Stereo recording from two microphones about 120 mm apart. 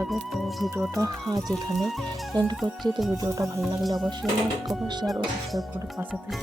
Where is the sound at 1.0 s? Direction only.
30° right (ahead or behind).